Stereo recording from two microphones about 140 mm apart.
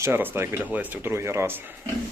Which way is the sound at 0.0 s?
15° right (ahead or behind).